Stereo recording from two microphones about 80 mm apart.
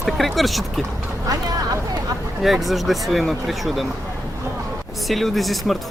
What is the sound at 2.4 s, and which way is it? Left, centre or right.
Speech, centre.